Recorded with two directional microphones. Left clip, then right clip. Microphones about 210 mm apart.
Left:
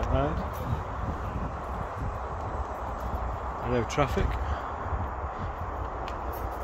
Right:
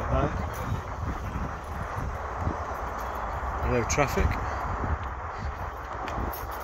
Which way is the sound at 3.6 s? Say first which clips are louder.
Right 1 dB; centre (ahead or behind).